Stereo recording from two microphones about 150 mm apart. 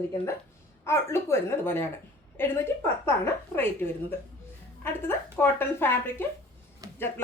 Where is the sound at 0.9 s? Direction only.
15° left (ahead or behind).